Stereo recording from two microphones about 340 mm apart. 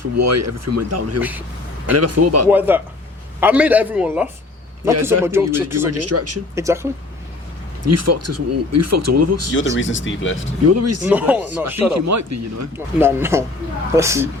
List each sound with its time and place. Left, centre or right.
0.2 s speech: right
1.2 s a man's voice: centre
1.9 s speech: right
2.5 s a man's voice: centre
5.7 s speech: right
6.6 s speech: centre
7.9 s speech: right
9.6 s speech: left
10.7 s speech: right
11.0 s a man's voice: centre
11.9 s speech: right
12.7 s speech: centre